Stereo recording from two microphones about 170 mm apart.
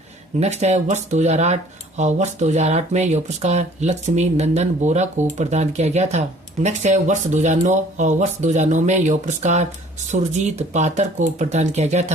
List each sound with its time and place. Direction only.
0.3 s speech: 40° right (ahead or behind)